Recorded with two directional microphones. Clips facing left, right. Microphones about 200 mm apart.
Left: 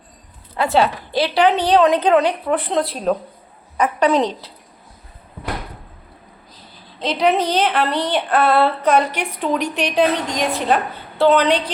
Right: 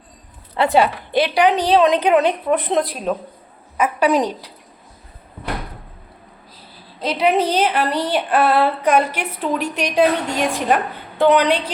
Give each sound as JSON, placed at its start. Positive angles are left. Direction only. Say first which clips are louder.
{"t": 0.7, "sound": "a woman's voice", "louder": "even", "side_deg": -15}
{"t": 3.8, "sound": "a woman's voice", "louder": "even", "side_deg": -10}
{"t": 7.0, "sound": "a woman's voice", "louder": "even", "side_deg": -10}